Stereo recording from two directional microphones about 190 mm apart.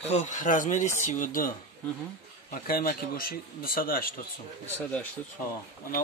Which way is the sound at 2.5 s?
50° left (ahead or behind).